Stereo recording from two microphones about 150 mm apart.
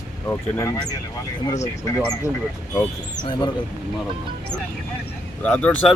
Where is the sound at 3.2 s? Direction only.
35° left (ahead or behind).